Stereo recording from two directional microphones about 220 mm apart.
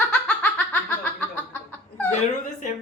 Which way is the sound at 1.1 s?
10° left (ahead or behind).